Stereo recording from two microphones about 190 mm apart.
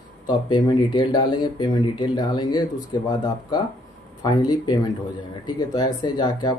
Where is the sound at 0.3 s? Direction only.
25° left (ahead or behind).